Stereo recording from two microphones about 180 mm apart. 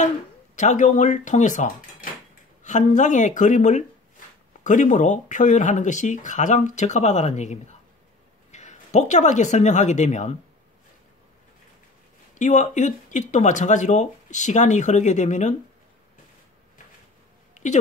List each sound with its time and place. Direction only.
0.6 s speech: 40° left (ahead or behind)
12.4 s speech: 40° left (ahead or behind)